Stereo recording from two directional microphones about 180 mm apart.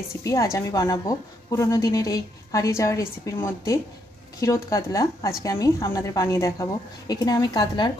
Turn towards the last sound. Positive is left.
turn(degrees=25)  # may be behind; listen again after turning